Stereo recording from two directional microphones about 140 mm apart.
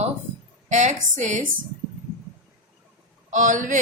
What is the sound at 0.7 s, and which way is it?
Speech, 60° right (ahead or behind).